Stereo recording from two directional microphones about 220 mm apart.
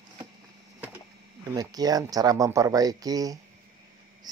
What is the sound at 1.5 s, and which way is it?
Speech, 15° right (ahead or behind).